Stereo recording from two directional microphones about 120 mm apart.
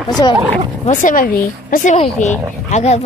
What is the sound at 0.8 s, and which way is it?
Speech, 90° left.